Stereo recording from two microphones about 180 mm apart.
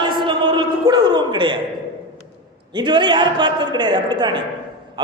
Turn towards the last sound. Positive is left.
turn(degrees=-25)  # may be behind; listen again after turning